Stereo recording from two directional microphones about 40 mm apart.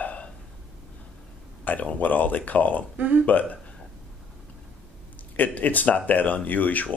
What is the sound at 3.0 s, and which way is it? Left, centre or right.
Speech, right.